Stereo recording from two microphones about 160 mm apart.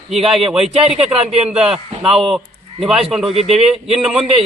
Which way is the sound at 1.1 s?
40° right (ahead or behind).